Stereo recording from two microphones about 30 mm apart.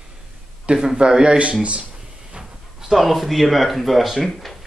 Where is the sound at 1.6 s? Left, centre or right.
Right.